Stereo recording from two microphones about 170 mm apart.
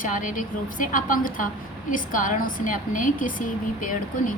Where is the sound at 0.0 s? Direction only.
50° left (ahead or behind).